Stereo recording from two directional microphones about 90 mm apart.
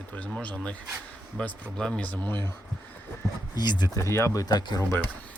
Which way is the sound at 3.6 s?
55° left (ahead or behind).